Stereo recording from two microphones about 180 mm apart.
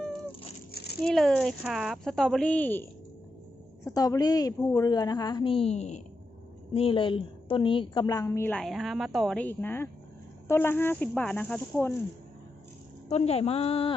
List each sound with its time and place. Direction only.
0.7 s a sound: 60° left (ahead or behind)
1.0 s speech: 5° left (ahead or behind)
3.8 s a woman's voice: 20° left (ahead or behind)
13.1 s a woman's voice: 35° left (ahead or behind)